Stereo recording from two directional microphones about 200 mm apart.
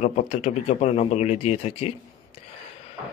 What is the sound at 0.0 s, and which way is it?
A man's voice, 35° left (ahead or behind).